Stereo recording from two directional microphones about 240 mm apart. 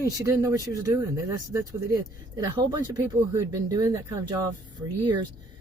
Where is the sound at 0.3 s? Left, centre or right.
Centre.